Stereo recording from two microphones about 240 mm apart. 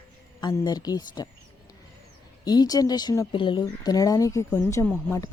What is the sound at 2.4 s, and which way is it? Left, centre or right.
Speech, centre.